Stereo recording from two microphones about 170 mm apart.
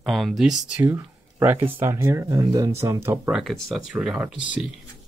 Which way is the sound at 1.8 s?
15° right (ahead or behind).